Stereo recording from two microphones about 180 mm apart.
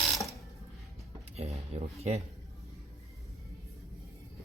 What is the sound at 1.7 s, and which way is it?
Speech, 35° right (ahead or behind).